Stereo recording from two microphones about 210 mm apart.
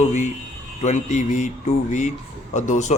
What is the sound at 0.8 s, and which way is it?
A man's voice, 35° left (ahead or behind).